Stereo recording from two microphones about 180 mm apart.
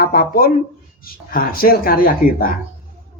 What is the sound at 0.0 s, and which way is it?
Speech, 55° left (ahead or behind).